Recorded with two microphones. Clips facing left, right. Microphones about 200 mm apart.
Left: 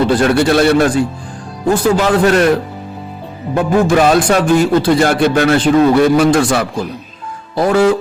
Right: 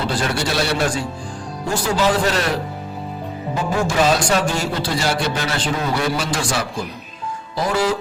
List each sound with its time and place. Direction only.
0.1 s speech: 60° left (ahead or behind)
3.5 s speech: 60° left (ahead or behind)